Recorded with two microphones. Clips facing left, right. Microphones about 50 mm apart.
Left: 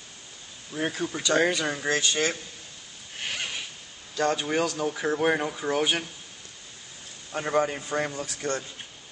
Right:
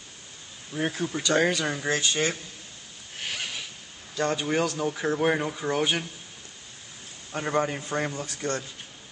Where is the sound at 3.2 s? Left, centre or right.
Centre.